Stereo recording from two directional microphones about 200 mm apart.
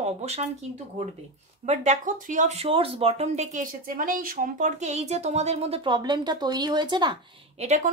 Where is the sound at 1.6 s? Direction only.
35° right (ahead or behind).